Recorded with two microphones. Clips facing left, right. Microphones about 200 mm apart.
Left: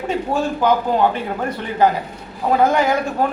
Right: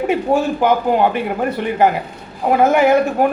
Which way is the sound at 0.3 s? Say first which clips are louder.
Right 5 dB; 25° right (ahead or behind).